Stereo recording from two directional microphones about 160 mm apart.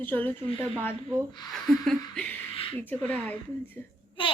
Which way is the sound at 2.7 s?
10° left (ahead or behind).